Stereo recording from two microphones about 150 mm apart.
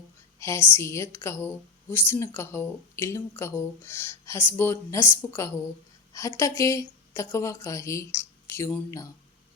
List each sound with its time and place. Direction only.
0.3 s a woman's voice: 20° left (ahead or behind)